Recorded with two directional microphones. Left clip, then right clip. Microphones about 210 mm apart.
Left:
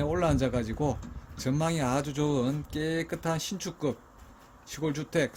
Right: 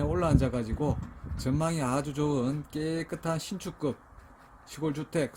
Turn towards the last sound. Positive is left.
turn(degrees=-15)  # may be behind; listen again after turning